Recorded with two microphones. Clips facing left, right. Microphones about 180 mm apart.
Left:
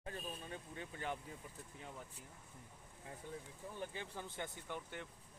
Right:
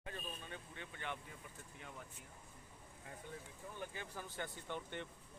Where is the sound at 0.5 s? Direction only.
35° left (ahead or behind).